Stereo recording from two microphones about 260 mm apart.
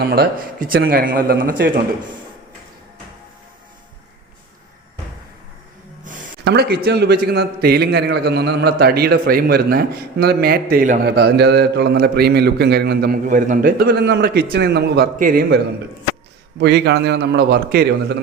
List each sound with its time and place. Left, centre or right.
0.0 s a man's voice: right
6.1 s a man's voice: right